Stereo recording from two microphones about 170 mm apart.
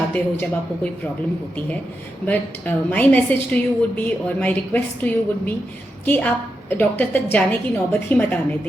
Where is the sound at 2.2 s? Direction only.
10° left (ahead or behind).